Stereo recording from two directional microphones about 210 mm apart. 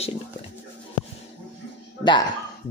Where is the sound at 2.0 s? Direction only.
20° left (ahead or behind).